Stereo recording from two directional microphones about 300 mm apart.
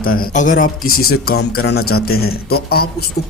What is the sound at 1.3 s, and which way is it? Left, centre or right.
Speech, left.